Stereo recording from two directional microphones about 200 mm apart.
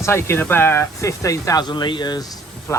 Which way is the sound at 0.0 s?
15° left (ahead or behind).